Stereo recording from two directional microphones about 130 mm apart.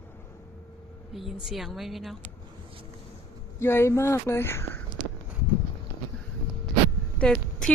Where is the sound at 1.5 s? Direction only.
Centre (ahead or behind).